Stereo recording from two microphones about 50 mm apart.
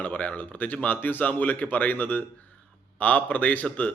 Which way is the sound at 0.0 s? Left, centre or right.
Left.